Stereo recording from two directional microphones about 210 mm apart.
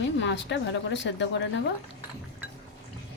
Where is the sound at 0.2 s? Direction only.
60° left (ahead or behind).